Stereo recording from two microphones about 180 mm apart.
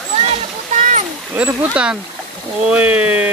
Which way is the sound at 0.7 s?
40° right (ahead or behind).